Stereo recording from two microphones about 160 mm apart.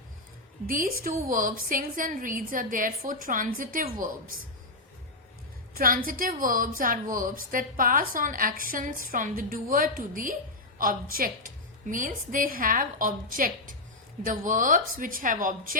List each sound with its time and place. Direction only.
0.7 s a woman's voice: 60° right (ahead or behind)
5.7 s a woman's voice: 65° right (ahead or behind)